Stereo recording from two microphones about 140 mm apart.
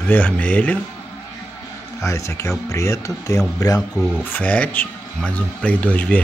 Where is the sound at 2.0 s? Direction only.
20° left (ahead or behind).